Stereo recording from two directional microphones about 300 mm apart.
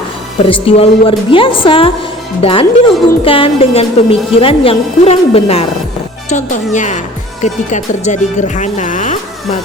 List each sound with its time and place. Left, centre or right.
0.4 s a woman's voice: centre